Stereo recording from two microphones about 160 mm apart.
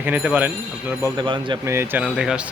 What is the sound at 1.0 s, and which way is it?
Speech, 30° right (ahead or behind).